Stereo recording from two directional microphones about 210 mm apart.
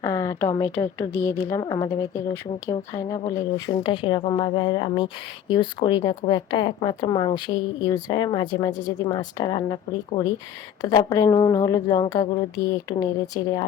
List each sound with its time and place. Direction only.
0.0 s speech: 15° left (ahead or behind)